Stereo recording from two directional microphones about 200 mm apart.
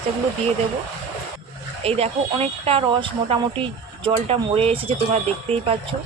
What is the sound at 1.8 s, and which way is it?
Speech, 30° right (ahead or behind).